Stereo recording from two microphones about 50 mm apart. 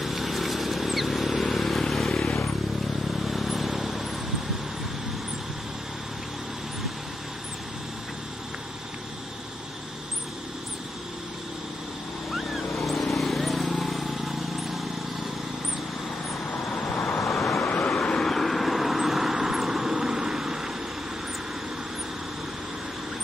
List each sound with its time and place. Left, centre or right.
0.0 s vehicle: centre
3.3 s vehicle: centre
12.3 s vehicle: centre
16.7 s vehicle: left
17.2 s vehicle: centre
17.6 s vehicle: left
17.9 s a sound: centre
18.3 s vehicle: centre